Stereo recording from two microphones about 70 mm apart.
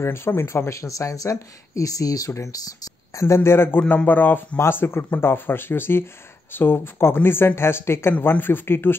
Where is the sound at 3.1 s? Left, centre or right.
Left.